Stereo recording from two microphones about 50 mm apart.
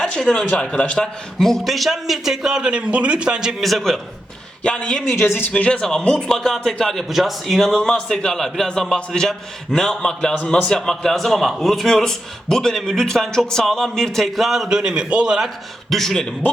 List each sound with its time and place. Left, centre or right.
0.5 s a man's voice: centre
1.4 s a man's voice: centre
3.6 s speech: centre
4.6 s a man's voice: centre
5.2 s speech: left
5.5 s a man's voice: left
6.1 s a man's voice: centre
10.7 s a man's voice: centre
14.8 s a man's voice: centre
15.9 s a man's voice: centre